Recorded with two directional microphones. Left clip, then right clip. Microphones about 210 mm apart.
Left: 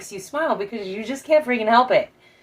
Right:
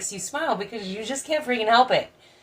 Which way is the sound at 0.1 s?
15° left (ahead or behind).